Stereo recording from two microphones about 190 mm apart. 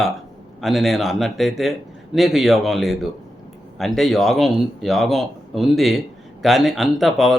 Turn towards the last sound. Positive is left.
turn(degrees=0)  # may be behind; listen again after turning